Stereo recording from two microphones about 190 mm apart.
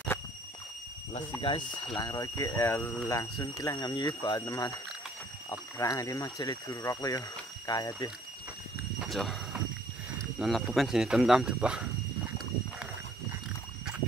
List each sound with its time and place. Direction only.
1.5 s speech: 25° left (ahead or behind)
9.0 s a sound: centre (ahead or behind)
10.4 s speech: centre (ahead or behind)